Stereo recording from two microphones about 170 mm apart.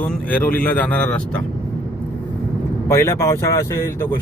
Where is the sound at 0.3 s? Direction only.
10° left (ahead or behind).